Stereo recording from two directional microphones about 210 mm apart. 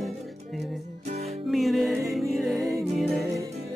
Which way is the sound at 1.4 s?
Centre (ahead or behind).